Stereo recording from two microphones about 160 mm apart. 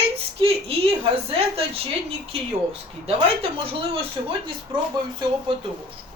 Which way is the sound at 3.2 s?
35° right (ahead or behind).